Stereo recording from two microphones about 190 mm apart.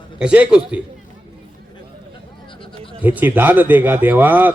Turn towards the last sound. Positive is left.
turn(degrees=-10)  # may be behind; listen again after turning